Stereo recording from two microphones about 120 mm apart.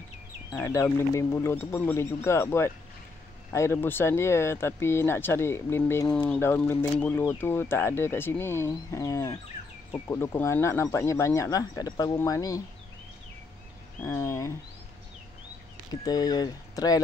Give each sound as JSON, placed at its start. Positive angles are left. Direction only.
{"t": 0.6, "sound": "speech", "side_deg": 20}
{"t": 14.0, "sound": "speech", "side_deg": 25}
{"t": 15.9, "sound": "speech", "side_deg": 35}